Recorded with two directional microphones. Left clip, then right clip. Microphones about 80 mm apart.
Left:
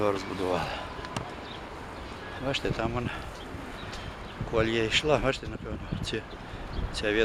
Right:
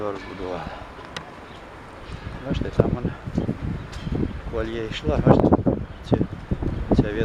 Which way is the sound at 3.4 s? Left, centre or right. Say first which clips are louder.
Right 14 dB; right.